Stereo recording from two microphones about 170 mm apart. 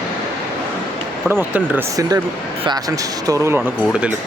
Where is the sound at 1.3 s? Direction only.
10° right (ahead or behind).